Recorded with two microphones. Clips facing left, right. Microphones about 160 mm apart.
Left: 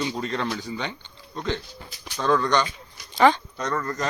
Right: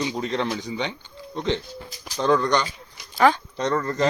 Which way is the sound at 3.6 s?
30° right (ahead or behind).